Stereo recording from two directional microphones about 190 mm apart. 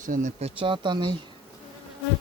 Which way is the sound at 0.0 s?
40° right (ahead or behind).